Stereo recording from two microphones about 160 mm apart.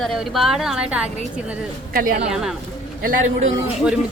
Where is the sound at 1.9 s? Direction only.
60° right (ahead or behind).